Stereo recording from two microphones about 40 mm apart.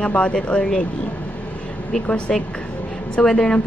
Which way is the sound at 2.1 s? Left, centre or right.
Left.